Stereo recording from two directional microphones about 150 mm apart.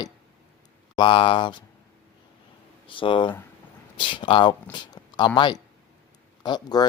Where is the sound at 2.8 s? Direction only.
35° left (ahead or behind).